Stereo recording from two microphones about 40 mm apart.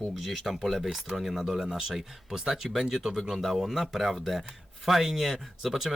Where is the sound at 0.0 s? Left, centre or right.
Centre.